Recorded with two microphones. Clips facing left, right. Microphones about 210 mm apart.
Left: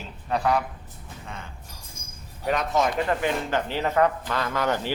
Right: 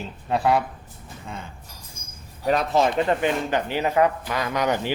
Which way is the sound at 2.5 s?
30° right (ahead or behind).